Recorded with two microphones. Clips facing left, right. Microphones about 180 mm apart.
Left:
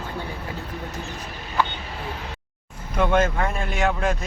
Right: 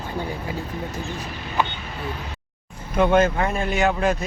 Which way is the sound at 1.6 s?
15° right (ahead or behind).